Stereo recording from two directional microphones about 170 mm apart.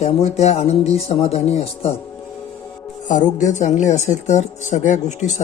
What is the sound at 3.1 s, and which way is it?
Speech, 45° left (ahead or behind).